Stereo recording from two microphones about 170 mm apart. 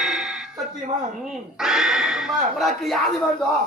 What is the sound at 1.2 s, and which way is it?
Speech, 5° right (ahead or behind).